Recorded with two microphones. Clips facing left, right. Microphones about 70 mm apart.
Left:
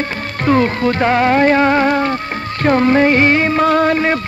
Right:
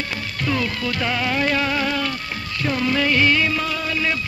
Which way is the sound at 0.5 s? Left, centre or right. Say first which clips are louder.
Left 11 dB; left.